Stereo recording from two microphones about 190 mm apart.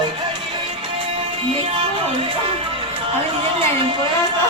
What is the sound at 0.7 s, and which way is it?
Music, 30° right (ahead or behind).